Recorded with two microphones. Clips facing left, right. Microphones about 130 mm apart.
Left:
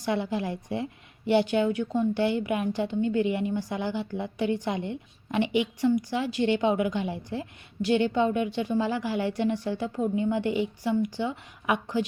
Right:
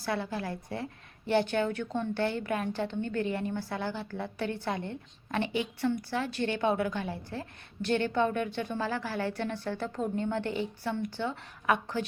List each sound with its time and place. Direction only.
0.0 s a woman's voice: 15° left (ahead or behind)